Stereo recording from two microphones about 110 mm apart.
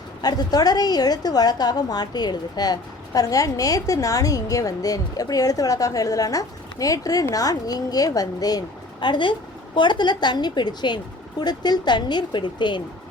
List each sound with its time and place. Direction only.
0.2 s a woman's voice: 40° left (ahead or behind)